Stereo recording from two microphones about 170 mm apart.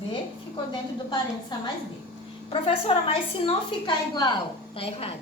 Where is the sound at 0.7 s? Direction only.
25° left (ahead or behind).